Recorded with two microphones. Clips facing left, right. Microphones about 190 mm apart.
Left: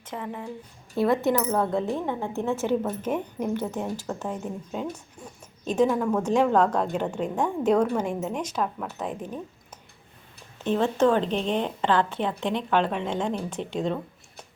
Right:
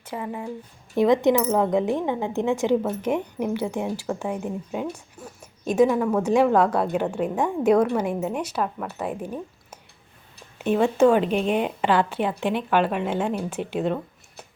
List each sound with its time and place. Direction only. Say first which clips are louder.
0.0 s a woman's voice: right 3 dB; 10° right (ahead or behind)